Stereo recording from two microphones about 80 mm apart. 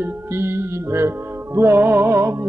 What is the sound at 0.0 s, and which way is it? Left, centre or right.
Music, right.